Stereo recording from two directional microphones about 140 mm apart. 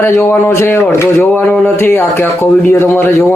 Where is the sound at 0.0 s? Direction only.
15° left (ahead or behind).